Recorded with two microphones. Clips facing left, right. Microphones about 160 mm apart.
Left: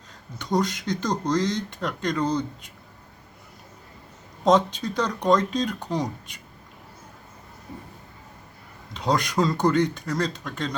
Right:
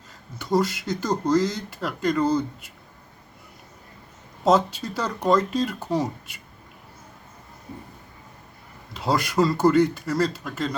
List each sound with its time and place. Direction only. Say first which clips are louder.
0.3 s speech: right 2 dB; 5° right (ahead or behind)
4.4 s speech: even; 5° right (ahead or behind)
8.9 s speech: even; 5° right (ahead or behind)